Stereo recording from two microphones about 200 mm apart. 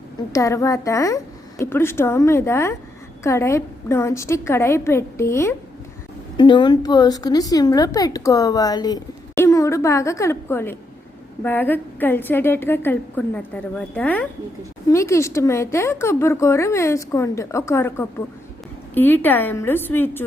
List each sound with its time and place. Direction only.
0.3 s a woman's voice: 15° left (ahead or behind)